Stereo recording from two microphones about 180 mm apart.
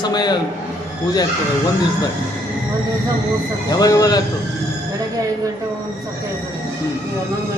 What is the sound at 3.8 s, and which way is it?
Speech, 20° left (ahead or behind).